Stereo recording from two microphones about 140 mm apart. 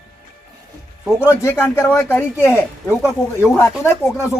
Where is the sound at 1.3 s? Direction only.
20° left (ahead or behind).